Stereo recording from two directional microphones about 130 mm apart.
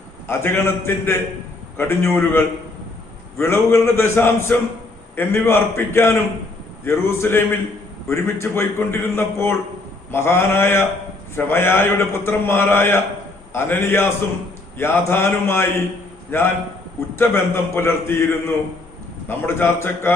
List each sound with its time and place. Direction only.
0.3 s a man's voice: 20° left (ahead or behind)